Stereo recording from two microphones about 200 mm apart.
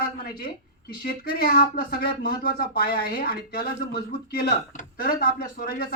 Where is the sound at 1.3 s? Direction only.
50° left (ahead or behind).